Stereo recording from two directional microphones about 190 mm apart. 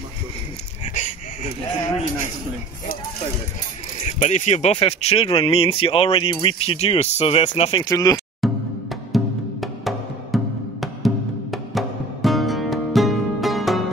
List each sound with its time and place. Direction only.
1.0 s a sound: 40° left (ahead or behind)
4.0 s speech: 40° left (ahead or behind)
7.8 s speech: 20° left (ahead or behind)
8.4 s music: centre (ahead or behind)